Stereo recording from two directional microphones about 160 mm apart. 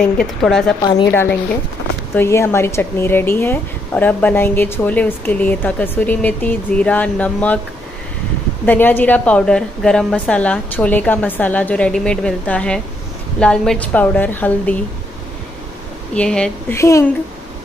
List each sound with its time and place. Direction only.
0.0 s a woman's voice: 5° left (ahead or behind)
2.1 s speech: 15° left (ahead or behind)
8.6 s speech: 10° left (ahead or behind)
16.2 s a woman's voice: 5° left (ahead or behind)
16.7 s a woman's voice: 20° left (ahead or behind)